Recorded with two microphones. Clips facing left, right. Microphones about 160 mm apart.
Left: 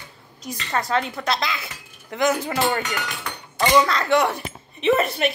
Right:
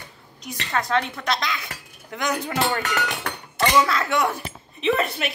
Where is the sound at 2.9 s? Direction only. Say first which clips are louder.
Right 3 dB; 60° right (ahead or behind).